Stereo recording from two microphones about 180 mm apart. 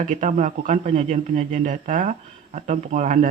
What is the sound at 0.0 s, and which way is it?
Speech, 45° right (ahead or behind).